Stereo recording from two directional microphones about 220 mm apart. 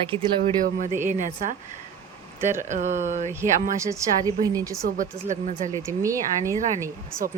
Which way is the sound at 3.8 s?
15° right (ahead or behind).